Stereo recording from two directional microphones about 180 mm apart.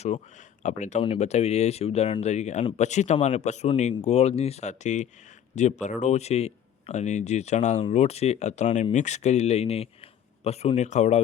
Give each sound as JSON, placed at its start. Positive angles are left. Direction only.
{"t": 0.0, "sound": "speech", "side_deg": 40}